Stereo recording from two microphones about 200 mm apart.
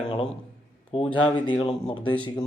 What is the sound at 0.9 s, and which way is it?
Speech, 25° left (ahead or behind).